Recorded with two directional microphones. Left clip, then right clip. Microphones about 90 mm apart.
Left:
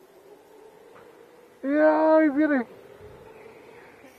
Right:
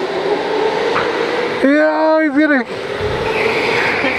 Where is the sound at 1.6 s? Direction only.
15° right (ahead or behind).